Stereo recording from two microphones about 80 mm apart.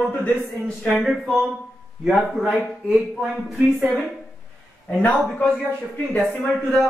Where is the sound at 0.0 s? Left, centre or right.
Centre.